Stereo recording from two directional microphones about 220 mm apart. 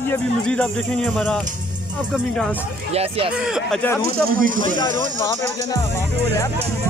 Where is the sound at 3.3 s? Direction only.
5° right (ahead or behind).